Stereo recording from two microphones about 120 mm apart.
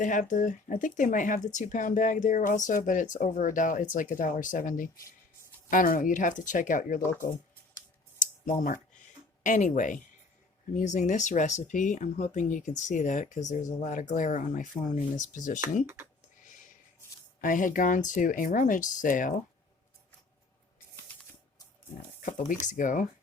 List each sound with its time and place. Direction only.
0.0 s speech: 90° left
6.0 s speech: 90° left
7.0 s speech: 20° left (ahead or behind)
8.2 s a sound: 90° left
9.4 s speech: 90° left
17.5 s speech: 90° left
22.6 s speech: 90° left